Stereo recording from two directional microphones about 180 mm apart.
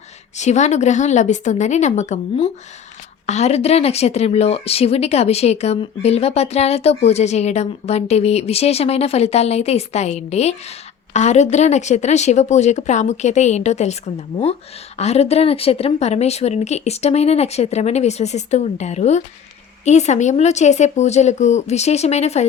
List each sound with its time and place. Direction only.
0.3 s a woman's voice: 40° left (ahead or behind)